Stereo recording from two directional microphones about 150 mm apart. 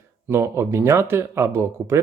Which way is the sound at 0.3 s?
15° right (ahead or behind).